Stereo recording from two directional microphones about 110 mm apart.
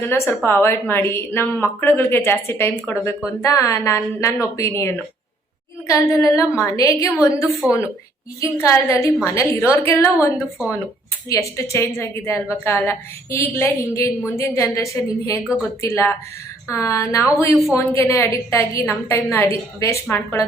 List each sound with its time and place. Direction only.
0.1 s a woman's voice: 20° left (ahead or behind)
7.6 s a woman's voice: 10° right (ahead or behind)
8.4 s a woman's voice: 30° left (ahead or behind)